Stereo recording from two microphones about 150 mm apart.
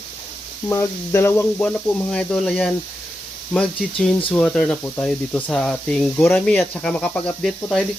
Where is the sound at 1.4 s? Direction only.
5° left (ahead or behind).